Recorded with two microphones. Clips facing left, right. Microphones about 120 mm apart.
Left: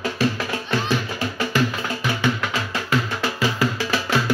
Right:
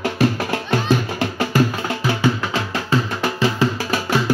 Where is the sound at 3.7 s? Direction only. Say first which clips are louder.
Right 1 dB; 45° right (ahead or behind).